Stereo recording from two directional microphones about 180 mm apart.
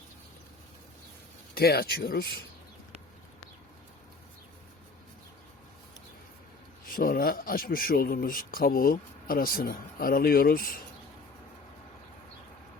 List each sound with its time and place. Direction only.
1.5 s speech: 60° left (ahead or behind)
6.8 s speech: 55° left (ahead or behind)